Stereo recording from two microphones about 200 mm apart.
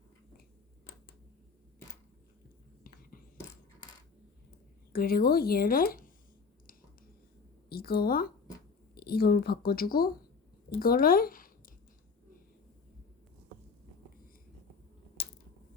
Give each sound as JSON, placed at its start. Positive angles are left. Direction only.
{"t": 2.8, "sound": "whispering", "side_deg": 45}
{"t": 4.9, "sound": "speech", "side_deg": 50}
{"t": 7.7, "sound": "a woman's voice", "side_deg": 50}